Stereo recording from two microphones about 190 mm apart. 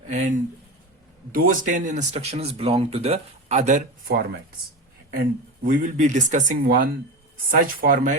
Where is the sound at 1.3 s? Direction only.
50° right (ahead or behind).